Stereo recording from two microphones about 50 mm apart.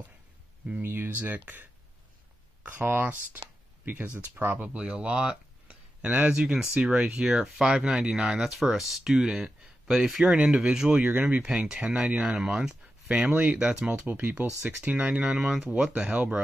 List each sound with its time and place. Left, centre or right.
0.7 s speech: right
4.6 s speech: right
7.2 s speech: centre
10.3 s speech: centre
11.1 s speech: right
11.6 s speech: centre
11.9 s speech: right
12.3 s speech: centre
14.0 s speech: right
15.0 s speech: right
15.3 s speech: centre
15.9 s speech: right